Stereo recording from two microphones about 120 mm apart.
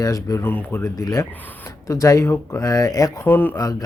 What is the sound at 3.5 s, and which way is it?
Speech, 30° left (ahead or behind).